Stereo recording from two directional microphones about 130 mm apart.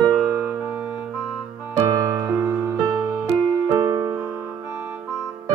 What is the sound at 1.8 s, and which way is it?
Music, 15° right (ahead or behind).